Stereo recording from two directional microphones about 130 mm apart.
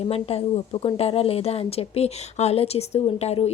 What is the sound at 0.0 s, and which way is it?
A woman's voice, 50° left (ahead or behind).